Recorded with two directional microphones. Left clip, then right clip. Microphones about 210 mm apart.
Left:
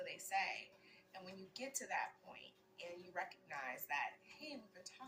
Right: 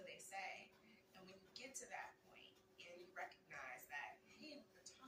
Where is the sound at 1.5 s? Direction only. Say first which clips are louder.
Left 8 dB; 55° left (ahead or behind).